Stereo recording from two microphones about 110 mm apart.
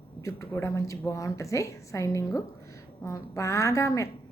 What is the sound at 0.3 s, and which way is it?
A woman's voice, 25° left (ahead or behind).